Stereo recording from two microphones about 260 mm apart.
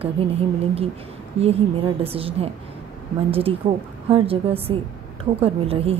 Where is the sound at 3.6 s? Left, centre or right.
Right.